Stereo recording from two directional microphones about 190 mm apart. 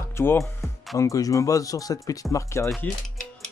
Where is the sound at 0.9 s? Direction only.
15° left (ahead or behind).